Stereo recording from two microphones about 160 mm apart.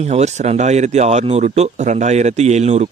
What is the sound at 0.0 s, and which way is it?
Speech, 45° right (ahead or behind).